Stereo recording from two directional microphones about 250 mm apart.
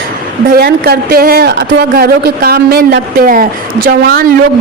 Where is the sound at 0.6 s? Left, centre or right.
Right.